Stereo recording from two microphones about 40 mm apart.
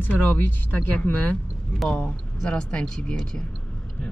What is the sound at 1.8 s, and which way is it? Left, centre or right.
Speech, left.